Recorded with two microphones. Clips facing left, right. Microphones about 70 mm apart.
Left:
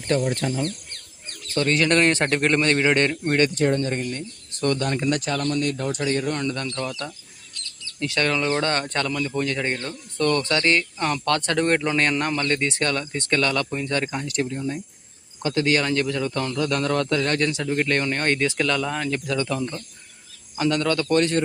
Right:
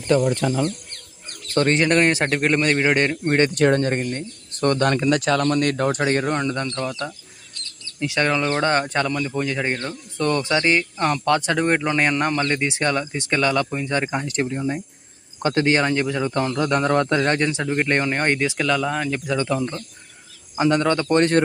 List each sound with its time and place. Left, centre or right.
1.6 s a man's voice: right
1.9 s speech: centre
3.5 s speech: right
3.8 s a man's voice: right
4.8 s speech: right
5.5 s speech: right
5.9 s a man's voice: right
6.4 s speech: right
6.7 s speech: centre
19.2 s speech: right